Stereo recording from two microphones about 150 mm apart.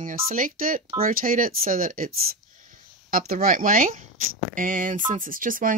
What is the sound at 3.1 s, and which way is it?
Speech, 70° right (ahead or behind).